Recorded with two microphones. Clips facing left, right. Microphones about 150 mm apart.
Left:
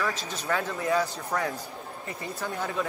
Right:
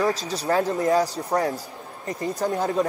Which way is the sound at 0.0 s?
35° right (ahead or behind).